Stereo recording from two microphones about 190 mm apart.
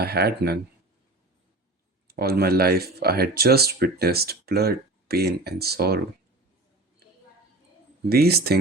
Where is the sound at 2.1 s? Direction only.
55° right (ahead or behind).